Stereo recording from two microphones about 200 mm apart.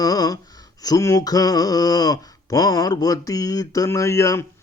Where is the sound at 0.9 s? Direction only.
15° left (ahead or behind).